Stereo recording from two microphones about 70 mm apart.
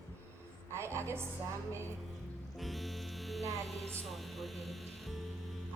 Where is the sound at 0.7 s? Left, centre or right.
Right.